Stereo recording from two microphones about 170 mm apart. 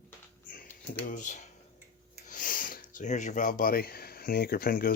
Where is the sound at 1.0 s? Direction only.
50° left (ahead or behind).